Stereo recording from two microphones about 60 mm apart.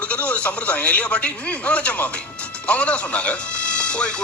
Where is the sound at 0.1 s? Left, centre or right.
Centre.